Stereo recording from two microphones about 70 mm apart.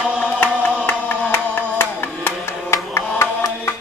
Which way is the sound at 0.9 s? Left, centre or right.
Left.